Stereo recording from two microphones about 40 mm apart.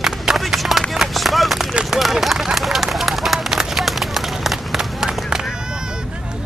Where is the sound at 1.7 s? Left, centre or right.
Centre.